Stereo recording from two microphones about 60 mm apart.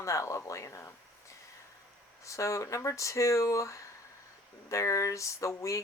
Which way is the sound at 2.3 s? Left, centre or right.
Left.